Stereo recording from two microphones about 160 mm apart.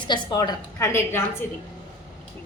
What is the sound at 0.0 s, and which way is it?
A woman's voice, 30° left (ahead or behind).